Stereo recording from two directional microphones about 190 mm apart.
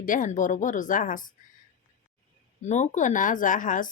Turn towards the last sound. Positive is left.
turn(degrees=45)  # may be behind; listen again after turning